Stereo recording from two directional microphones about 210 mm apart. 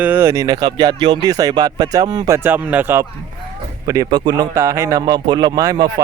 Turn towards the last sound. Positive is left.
turn(degrees=-15)  # may be behind; listen again after turning